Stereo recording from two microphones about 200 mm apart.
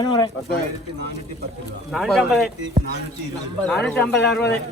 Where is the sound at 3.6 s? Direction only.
5° left (ahead or behind).